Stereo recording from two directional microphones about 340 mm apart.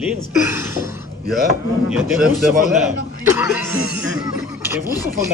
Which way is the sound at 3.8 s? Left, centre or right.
Left.